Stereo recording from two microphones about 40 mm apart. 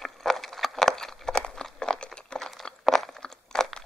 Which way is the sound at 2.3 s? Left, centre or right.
Left.